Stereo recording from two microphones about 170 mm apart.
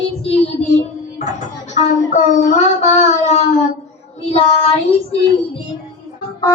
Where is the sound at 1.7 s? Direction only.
45° left (ahead or behind).